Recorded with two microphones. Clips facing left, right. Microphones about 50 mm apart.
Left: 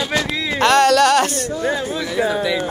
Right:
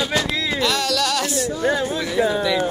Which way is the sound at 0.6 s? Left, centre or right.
Left.